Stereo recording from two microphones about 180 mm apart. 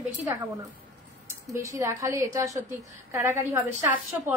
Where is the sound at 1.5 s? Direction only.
15° right (ahead or behind).